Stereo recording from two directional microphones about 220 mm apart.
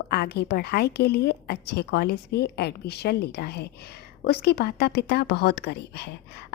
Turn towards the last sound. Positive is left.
turn(degrees=45)  # may be behind; listen again after turning